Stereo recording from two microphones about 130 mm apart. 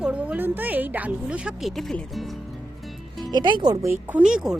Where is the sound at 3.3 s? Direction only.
35° right (ahead or behind).